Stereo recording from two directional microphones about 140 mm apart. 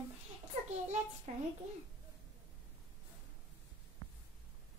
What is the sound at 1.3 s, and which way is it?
Speech, 60° right (ahead or behind).